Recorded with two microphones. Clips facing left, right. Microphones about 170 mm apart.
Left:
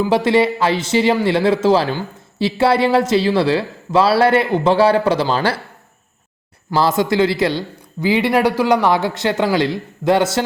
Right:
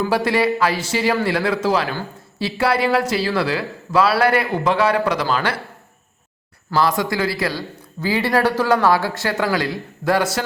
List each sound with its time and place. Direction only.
0.1 s speech: 25° left (ahead or behind)
6.7 s speech: 25° left (ahead or behind)